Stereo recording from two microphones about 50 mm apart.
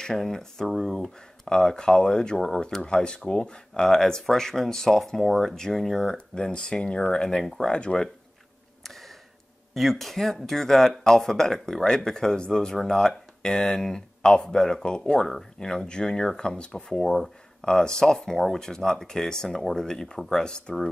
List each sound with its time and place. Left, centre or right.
0.0 s speech: centre
6.1 s speech: centre
8.8 s a sound: centre
9.8 s speech: centre